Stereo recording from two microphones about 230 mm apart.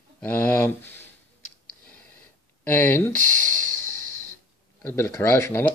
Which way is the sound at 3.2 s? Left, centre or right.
Right.